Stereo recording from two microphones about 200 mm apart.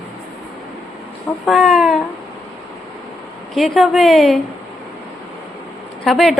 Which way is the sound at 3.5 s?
Centre (ahead or behind).